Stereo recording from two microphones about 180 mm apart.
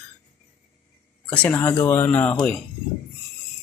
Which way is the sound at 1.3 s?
10° left (ahead or behind).